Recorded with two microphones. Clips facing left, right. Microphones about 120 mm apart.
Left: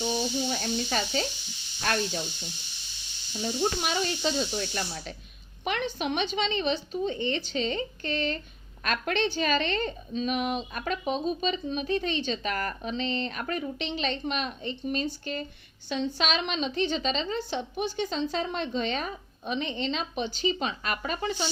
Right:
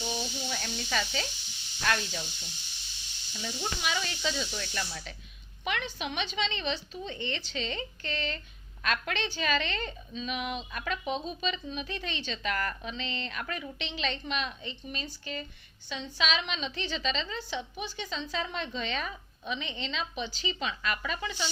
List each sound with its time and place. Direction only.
0.2 s speech: 35° left (ahead or behind)
3.3 s speech: 35° left (ahead or behind)
5.6 s a woman's voice: 50° left (ahead or behind)